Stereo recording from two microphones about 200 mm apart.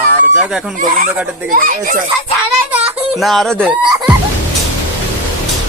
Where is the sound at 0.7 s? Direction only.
40° right (ahead or behind).